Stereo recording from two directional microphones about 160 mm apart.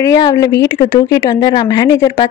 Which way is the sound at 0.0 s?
20° left (ahead or behind).